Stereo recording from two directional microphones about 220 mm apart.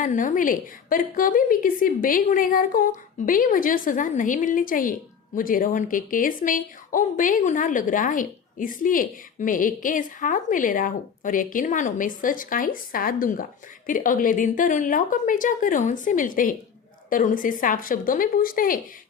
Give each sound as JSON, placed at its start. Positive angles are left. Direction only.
{"t": 0.0, "sound": "a woman's voice", "side_deg": 35}